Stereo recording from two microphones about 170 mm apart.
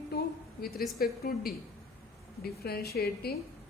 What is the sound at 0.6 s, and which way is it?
A woman's voice, 65° left (ahead or behind).